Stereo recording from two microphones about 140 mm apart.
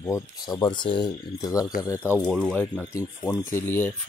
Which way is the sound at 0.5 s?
30° left (ahead or behind).